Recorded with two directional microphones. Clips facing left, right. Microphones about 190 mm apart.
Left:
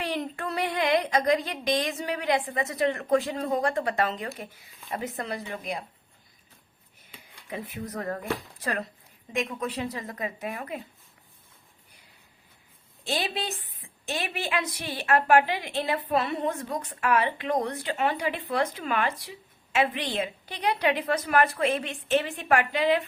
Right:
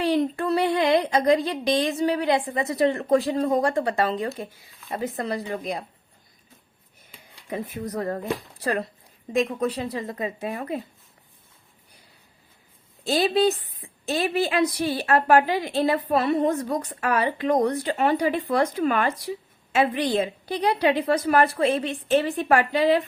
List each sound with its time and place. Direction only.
0.0 s a woman's voice: 35° right (ahead or behind)
7.5 s a woman's voice: 40° right (ahead or behind)
9.3 s a woman's voice: 35° right (ahead or behind)
13.1 s a woman's voice: 35° right (ahead or behind)